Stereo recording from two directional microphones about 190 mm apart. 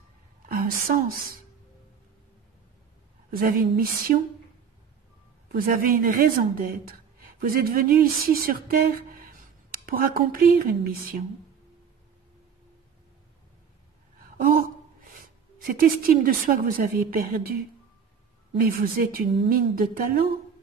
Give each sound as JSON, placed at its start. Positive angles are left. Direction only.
{"t": 0.5, "sound": "a woman's voice", "side_deg": -50}
{"t": 3.3, "sound": "a woman's voice", "side_deg": -50}
{"t": 5.5, "sound": "a woman's voice", "side_deg": -50}
{"t": 6.9, "sound": "a sound", "side_deg": -50}
{"t": 15.6, "sound": "a woman's voice", "side_deg": -50}
{"t": 18.6, "sound": "a woman's voice", "side_deg": -50}